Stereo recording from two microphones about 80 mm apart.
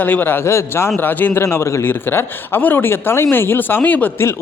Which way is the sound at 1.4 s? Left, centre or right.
Left.